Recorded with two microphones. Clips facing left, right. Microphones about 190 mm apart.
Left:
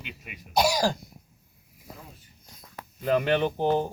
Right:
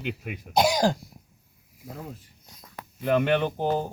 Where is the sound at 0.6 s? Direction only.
20° right (ahead or behind).